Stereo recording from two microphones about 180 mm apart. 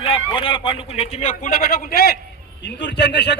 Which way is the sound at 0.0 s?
30° left (ahead or behind).